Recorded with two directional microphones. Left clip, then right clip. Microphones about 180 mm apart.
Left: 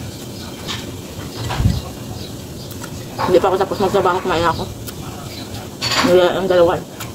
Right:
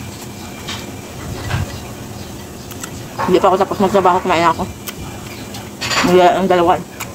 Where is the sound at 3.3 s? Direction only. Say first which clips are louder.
Right 2 dB; 15° right (ahead or behind).